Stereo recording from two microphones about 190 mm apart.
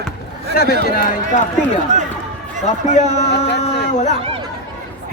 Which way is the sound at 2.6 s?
35° left (ahead or behind).